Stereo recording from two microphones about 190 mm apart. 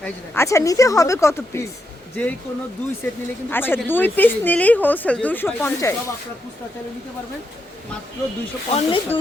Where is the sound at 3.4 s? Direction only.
10° left (ahead or behind).